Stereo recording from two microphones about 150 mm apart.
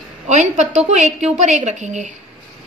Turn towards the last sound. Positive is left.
turn(degrees=-50)  # may be behind; listen again after turning